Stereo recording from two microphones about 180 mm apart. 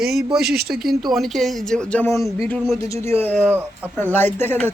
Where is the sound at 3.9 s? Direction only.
10° left (ahead or behind).